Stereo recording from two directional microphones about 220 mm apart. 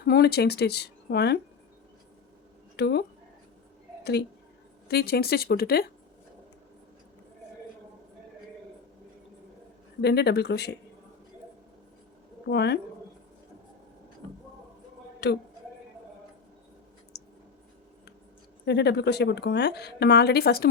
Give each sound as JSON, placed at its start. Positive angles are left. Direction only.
{"t": 0.0, "sound": "speech", "side_deg": 45}
{"t": 2.7, "sound": "speech", "side_deg": 50}
{"t": 4.9, "sound": "speech", "side_deg": 45}
{"t": 10.0, "sound": "speech", "side_deg": 50}
{"t": 12.5, "sound": "speech", "side_deg": 50}
{"t": 15.2, "sound": "speech", "side_deg": 50}
{"t": 18.6, "sound": "speech", "side_deg": 50}